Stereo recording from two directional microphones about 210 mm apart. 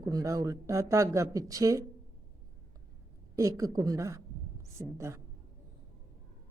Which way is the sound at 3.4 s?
15° right (ahead or behind).